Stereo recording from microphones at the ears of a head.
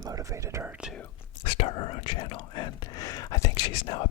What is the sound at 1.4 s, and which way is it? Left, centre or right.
Speech, left.